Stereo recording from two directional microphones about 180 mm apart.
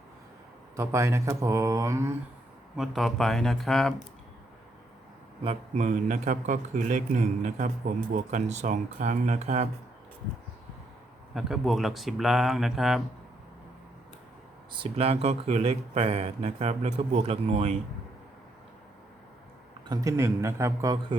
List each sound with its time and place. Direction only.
0.8 s speech: 15° right (ahead or behind)
2.7 s speech: centre (ahead or behind)
5.4 s speech: 30° right (ahead or behind)
5.8 s a man's voice: 45° right (ahead or behind)
11.3 s speech: centre (ahead or behind)
14.7 s speech: 30° right (ahead or behind)
19.9 s speech: 15° right (ahead or behind)